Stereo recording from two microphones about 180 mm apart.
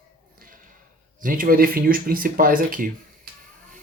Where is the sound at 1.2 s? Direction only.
50° right (ahead or behind).